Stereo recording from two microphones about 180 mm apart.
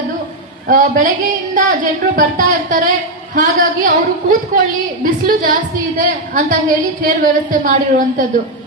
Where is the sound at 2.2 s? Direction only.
50° right (ahead or behind).